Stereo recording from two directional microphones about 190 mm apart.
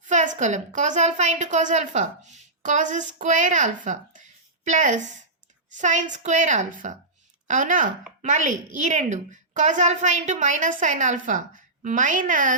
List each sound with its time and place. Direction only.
0.0 s a woman's voice: 40° right (ahead or behind)
3.8 s a sound: 40° right (ahead or behind)
5.7 s a woman's voice: 40° right (ahead or behind)